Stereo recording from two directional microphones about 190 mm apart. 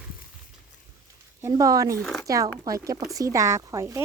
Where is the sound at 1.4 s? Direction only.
20° right (ahead or behind).